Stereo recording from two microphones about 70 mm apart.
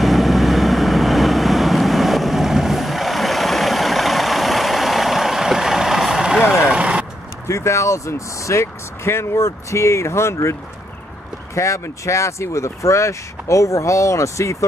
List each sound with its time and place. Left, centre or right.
0.0 s vehicle: centre
7.4 s speech: left
11.5 s speech: left